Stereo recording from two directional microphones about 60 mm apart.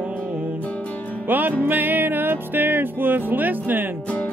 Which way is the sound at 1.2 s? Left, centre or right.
Right.